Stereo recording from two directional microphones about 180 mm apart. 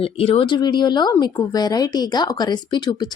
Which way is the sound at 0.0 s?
30° left (ahead or behind).